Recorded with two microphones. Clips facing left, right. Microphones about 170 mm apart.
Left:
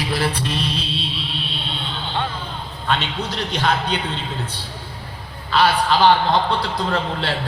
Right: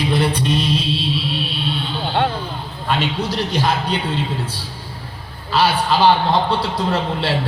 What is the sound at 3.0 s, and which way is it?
Speech, 10° right (ahead or behind).